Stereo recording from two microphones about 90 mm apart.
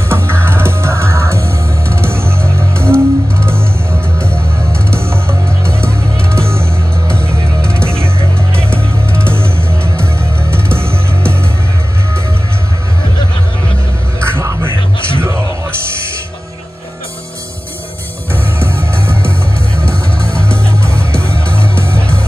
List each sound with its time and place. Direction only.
0.1 s music: 30° right (ahead or behind)
2.8 s music: 10° left (ahead or behind)
4.9 s music: 25° right (ahead or behind)
5.7 s music: 10° left (ahead or behind)
6.3 s music: 30° right (ahead or behind)
6.6 s music: 10° left (ahead or behind)
8.6 s music: 25° right (ahead or behind)
10.5 s music: 25° right (ahead or behind)
14.2 s music: 30° right (ahead or behind)
14.7 s music: 65° left (ahead or behind)
18.3 s music: 25° right (ahead or behind)
19.2 s music: 15° left (ahead or behind)
21.1 s music: 30° right (ahead or behind)
21.9 s music: 15° left (ahead or behind)